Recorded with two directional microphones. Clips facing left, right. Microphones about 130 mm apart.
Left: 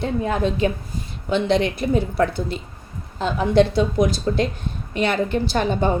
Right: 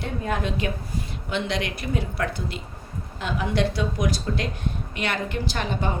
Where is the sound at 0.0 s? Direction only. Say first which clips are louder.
Left 6 dB; 25° left (ahead or behind).